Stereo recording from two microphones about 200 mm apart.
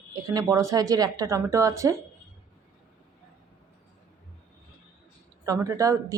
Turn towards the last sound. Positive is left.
turn(degrees=-15)  # may be behind; listen again after turning